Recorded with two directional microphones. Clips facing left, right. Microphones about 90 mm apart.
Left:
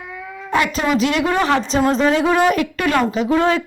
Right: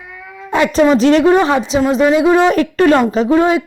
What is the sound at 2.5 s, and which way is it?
Speech, 35° right (ahead or behind).